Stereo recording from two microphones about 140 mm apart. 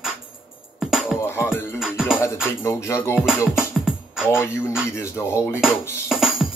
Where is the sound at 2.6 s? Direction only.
20° left (ahead or behind).